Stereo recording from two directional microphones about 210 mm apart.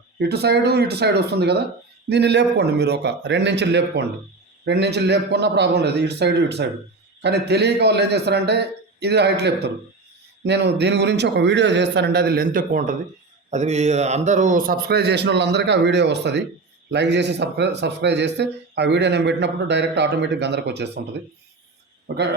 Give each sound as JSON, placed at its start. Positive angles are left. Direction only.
{"t": 0.2, "sound": "a man's voice", "side_deg": -50}